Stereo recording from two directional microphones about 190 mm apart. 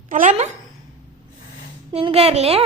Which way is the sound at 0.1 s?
40° right (ahead or behind).